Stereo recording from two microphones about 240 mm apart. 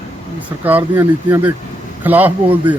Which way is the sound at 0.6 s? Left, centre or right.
Centre.